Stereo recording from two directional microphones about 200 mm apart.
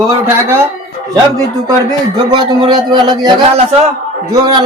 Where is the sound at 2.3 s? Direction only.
20° right (ahead or behind).